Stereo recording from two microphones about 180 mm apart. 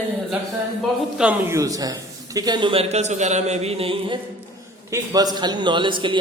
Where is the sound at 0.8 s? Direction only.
5° right (ahead or behind); by 4.1 s 30° right (ahead or behind).